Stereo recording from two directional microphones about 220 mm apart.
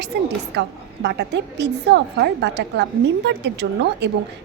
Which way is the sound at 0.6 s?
50° right (ahead or behind).